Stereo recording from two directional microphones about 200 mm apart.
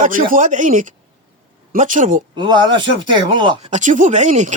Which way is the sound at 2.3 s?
25° right (ahead or behind).